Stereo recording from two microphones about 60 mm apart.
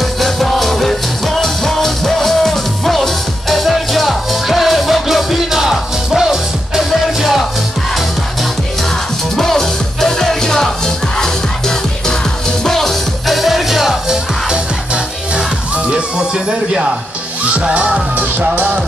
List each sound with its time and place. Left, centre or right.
0.2 s music: centre
9.4 s music: centre
15.9 s music: centre
17.6 s music: centre